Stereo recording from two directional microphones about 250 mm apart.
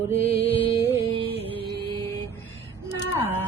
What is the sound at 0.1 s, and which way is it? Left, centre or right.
Music, left.